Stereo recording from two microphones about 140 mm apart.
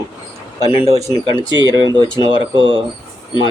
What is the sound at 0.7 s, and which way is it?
Speech, 40° left (ahead or behind).